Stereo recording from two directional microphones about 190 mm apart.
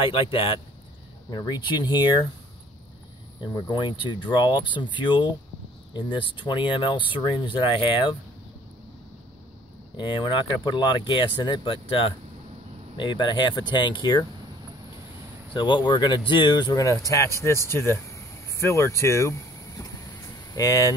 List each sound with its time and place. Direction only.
0.1 s speech: 25° left (ahead or behind)
3.3 s speech: 20° left (ahead or behind)
9.9 s speech: 25° left (ahead or behind)
15.5 s speech: 25° left (ahead or behind)